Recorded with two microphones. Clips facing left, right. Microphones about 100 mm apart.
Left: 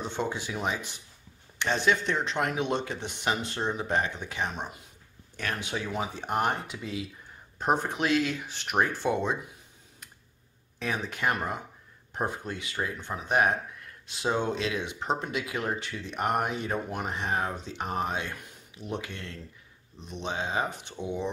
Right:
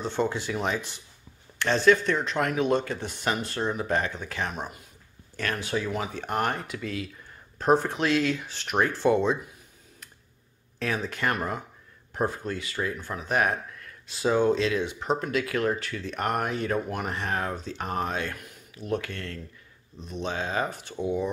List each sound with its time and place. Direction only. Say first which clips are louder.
0.0 s speech: right 4 dB; 15° left (ahead or behind)
10.8 s speech: right 2 dB; 10° left (ahead or behind)